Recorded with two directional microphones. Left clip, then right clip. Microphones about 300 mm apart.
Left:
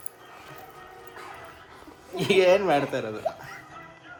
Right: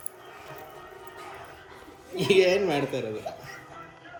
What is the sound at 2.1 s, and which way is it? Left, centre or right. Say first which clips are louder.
Speech: left 1 dB; centre.